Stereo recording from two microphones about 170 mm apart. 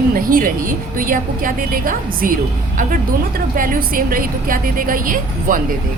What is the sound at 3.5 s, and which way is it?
A woman's voice, 55° right (ahead or behind).